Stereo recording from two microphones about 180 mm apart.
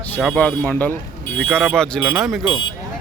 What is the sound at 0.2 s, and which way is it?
Speech, 5° left (ahead or behind).